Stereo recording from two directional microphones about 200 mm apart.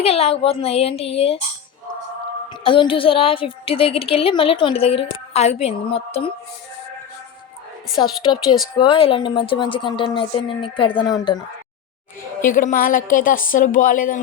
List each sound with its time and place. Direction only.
0.0 s a woman's voice: 30° left (ahead or behind)
2.6 s a woman's voice: 25° left (ahead or behind)
8.0 s a woman's voice: 25° left (ahead or behind)
12.4 s a woman's voice: 40° left (ahead or behind)